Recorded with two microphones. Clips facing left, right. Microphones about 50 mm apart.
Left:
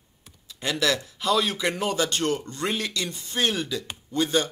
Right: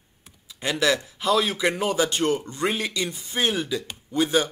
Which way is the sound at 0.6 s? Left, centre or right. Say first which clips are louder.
Right 2 dB; centre.